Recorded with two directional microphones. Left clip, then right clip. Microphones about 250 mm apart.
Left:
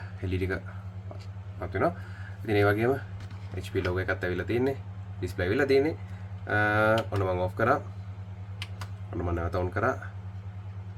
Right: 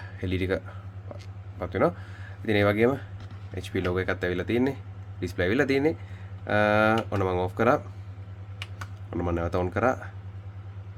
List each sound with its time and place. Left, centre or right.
0.2 s speech: right
9.0 s speech: right